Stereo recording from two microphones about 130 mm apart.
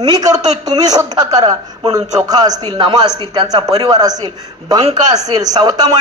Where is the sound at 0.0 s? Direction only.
30° right (ahead or behind).